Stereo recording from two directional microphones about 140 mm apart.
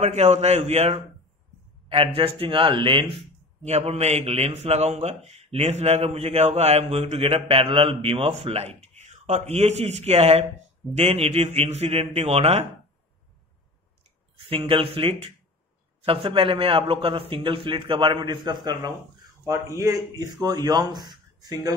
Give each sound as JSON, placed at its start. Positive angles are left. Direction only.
{"t": 0.0, "sound": "a man's voice", "side_deg": -50}
{"t": 3.6, "sound": "a man's voice", "side_deg": -50}
{"t": 14.5, "sound": "a man's voice", "side_deg": -40}